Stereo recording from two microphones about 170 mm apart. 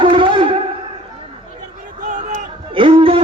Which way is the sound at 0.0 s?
30° right (ahead or behind).